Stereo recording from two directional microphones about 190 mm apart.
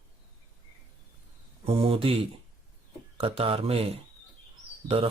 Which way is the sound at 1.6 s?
30° right (ahead or behind).